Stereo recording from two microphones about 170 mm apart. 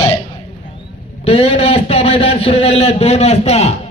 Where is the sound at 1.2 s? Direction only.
35° left (ahead or behind).